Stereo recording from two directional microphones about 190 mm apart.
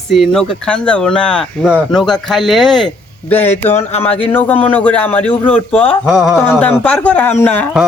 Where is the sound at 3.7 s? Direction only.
35° left (ahead or behind).